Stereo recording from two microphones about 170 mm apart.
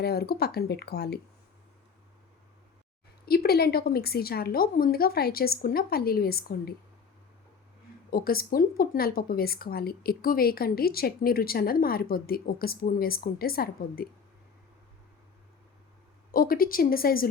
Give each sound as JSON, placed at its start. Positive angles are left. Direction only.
{"t": 0.0, "sound": "speech", "side_deg": 65}
{"t": 3.2, "sound": "a woman's voice", "side_deg": 65}
{"t": 8.1, "sound": "a woman's voice", "side_deg": 60}
{"t": 16.3, "sound": "a woman's voice", "side_deg": 55}